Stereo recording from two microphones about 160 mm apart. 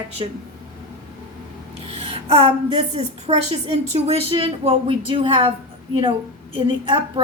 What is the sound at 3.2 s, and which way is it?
A woman's voice, 45° right (ahead or behind).